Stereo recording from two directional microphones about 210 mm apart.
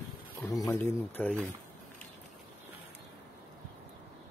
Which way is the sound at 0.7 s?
10° left (ahead or behind).